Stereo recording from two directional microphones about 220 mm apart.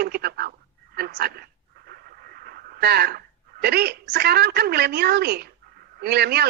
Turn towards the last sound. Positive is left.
turn(degrees=-45)  # may be behind; listen again after turning